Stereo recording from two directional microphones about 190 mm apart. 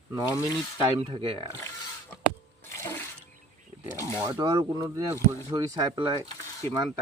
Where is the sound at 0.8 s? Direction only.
25° right (ahead or behind).